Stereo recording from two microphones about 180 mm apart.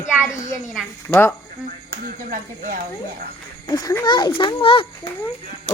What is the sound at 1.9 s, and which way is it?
Speech, 50° right (ahead or behind).